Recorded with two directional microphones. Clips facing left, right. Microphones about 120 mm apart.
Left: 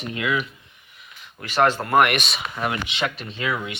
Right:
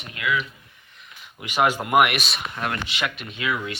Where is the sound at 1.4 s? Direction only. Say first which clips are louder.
Left 2 dB; 15° right (ahead or behind).